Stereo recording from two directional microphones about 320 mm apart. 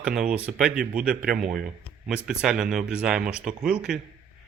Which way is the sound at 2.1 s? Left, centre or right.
Centre.